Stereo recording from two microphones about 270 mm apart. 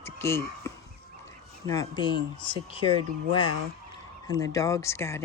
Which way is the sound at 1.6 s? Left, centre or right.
Centre.